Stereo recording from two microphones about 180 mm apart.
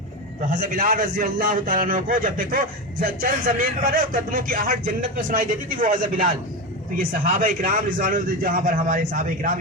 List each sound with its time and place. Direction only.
0.5 s a man's voice: 50° right (ahead or behind)